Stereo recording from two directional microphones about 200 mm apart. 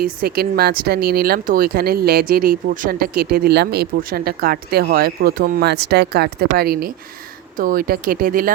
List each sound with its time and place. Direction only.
0.0 s speech: 50° right (ahead or behind)